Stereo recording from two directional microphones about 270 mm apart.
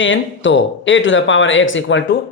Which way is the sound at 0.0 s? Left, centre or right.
Left.